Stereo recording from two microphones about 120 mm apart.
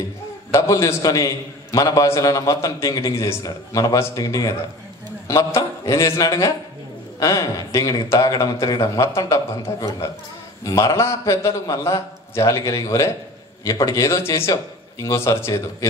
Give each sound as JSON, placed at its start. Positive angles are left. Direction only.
{"t": 0.5, "sound": "a man's voice", "side_deg": 25}